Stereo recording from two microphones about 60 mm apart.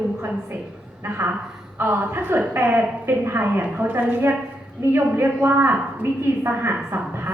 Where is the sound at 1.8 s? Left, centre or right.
Right.